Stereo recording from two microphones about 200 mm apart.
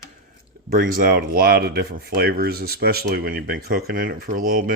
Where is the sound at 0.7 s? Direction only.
45° right (ahead or behind).